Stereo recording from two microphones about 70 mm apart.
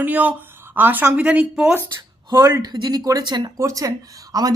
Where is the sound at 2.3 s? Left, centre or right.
Right.